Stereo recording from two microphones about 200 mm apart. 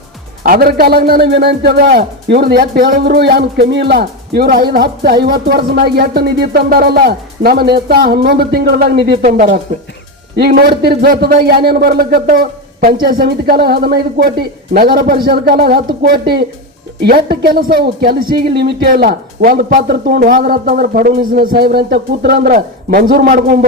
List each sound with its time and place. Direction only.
0.4 s speech: 50° right (ahead or behind)
9.0 s speech: 25° right (ahead or behind)
10.3 s speech: 55° right (ahead or behind)
17.4 s speech: 50° right (ahead or behind)